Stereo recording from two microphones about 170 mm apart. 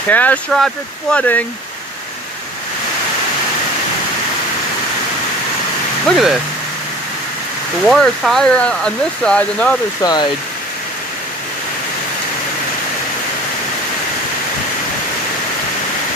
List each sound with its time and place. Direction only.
0.1 s speech: 10° left (ahead or behind)
6.1 s speech: centre (ahead or behind)
7.9 s speech: centre (ahead or behind)
10.0 s speech: 25° left (ahead or behind)